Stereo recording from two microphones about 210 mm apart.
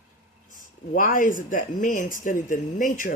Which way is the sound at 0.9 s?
40° left (ahead or behind).